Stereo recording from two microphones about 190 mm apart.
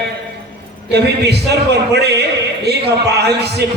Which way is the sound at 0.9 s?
60° right (ahead or behind).